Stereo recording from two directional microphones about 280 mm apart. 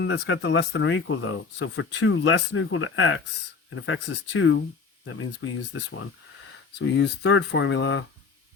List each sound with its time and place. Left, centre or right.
0.0 s speech: left